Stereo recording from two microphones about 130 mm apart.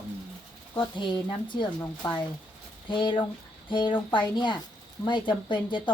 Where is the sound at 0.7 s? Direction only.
35° left (ahead or behind).